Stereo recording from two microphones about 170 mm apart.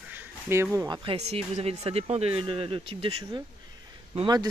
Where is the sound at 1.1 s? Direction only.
35° right (ahead or behind).